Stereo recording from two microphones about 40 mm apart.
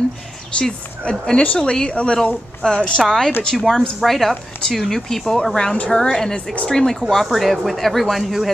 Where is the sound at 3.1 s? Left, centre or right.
Centre.